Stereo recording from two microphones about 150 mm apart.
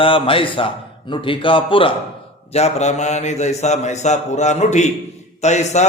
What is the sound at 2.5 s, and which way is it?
A man's voice, 45° left (ahead or behind).